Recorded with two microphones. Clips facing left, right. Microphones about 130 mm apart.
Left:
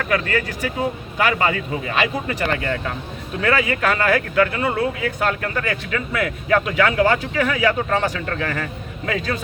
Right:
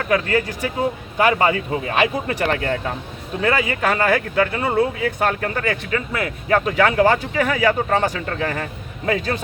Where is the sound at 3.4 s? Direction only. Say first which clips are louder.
Even; 25° right (ahead or behind).